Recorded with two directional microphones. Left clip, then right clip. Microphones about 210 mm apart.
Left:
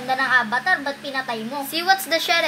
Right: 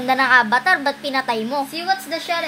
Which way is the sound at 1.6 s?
40° left (ahead or behind).